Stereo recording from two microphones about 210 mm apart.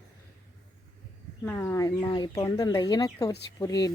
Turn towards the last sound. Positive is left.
turn(degrees=15)  # may be behind; listen again after turning